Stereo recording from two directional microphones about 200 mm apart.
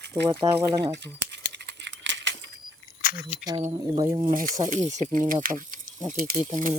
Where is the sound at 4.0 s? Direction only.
20° right (ahead or behind).